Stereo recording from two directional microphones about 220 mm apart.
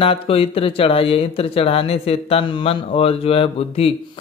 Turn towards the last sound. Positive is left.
turn(degrees=25)  # may be behind; listen again after turning